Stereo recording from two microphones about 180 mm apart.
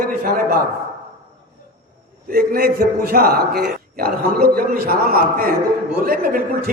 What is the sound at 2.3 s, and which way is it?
A man's voice, 55° right (ahead or behind).